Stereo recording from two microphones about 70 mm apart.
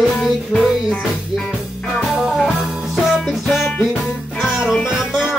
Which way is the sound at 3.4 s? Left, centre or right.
Centre.